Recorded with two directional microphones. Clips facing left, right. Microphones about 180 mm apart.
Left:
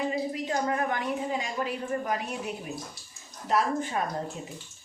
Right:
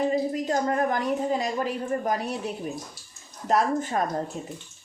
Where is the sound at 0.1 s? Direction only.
40° right (ahead or behind).